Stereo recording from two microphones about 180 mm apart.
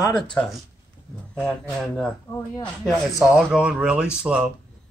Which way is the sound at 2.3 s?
15° left (ahead or behind).